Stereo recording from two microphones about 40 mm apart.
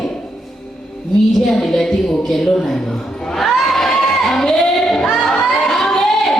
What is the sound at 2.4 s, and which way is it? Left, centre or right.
Speech, centre.